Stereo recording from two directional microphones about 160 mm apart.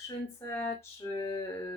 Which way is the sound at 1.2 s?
20° left (ahead or behind).